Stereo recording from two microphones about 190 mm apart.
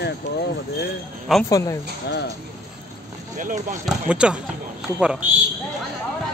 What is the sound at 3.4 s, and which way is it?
Speech, 45° right (ahead or behind).